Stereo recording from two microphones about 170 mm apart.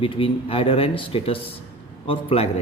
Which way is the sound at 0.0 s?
30° left (ahead or behind).